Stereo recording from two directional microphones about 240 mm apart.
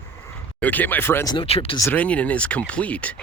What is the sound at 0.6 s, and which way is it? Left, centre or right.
Speech, centre.